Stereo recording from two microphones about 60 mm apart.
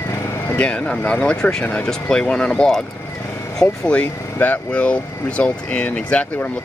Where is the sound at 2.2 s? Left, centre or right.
Centre.